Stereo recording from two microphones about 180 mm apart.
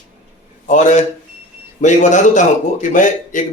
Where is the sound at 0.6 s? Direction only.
40° left (ahead or behind).